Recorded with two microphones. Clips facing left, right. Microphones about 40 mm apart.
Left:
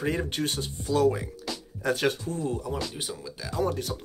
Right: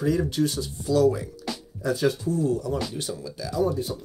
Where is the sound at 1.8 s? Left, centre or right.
Left.